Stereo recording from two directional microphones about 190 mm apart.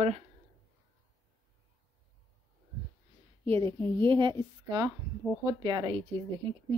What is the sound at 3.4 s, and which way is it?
Speech, 30° right (ahead or behind).